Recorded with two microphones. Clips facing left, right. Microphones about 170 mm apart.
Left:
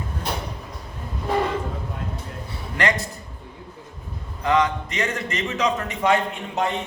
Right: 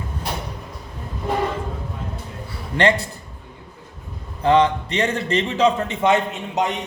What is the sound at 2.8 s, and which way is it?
Speech, 30° right (ahead or behind).